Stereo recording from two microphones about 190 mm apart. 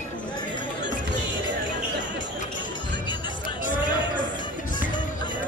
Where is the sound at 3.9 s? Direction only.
25° left (ahead or behind).